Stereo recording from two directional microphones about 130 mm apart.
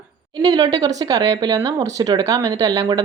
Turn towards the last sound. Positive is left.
turn(degrees=-30)  # may be behind; listen again after turning